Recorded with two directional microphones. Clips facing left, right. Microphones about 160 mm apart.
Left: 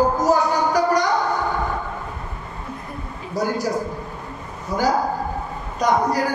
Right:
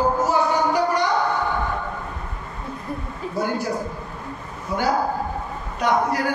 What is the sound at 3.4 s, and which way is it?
Speech, 40° left (ahead or behind).